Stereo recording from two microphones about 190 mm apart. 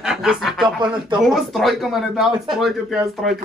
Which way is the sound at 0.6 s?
25° right (ahead or behind).